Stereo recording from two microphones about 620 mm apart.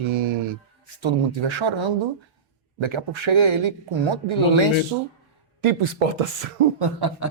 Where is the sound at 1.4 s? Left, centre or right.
Right.